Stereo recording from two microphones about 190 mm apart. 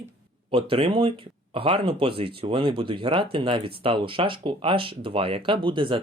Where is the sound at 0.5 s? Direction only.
30° right (ahead or behind).